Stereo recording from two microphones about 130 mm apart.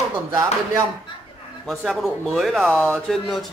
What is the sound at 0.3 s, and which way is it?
Speech, 20° right (ahead or behind).